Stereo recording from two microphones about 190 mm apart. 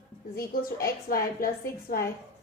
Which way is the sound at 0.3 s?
50° left (ahead or behind).